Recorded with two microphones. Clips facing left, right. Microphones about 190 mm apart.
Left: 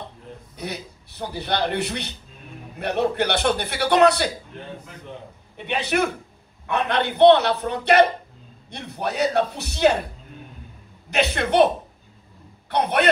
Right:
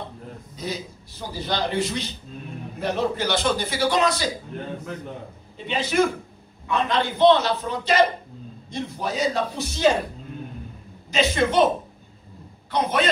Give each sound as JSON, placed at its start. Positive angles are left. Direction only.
{"t": 0.6, "sound": "a man's voice", "side_deg": 65}
{"t": 5.7, "sound": "a man's voice", "side_deg": 65}
{"t": 11.1, "sound": "a man's voice", "side_deg": 65}
{"t": 12.7, "sound": "a man's voice", "side_deg": 65}